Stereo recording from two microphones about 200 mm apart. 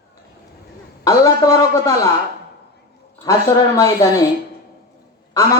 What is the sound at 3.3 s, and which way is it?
Speech, 15° left (ahead or behind).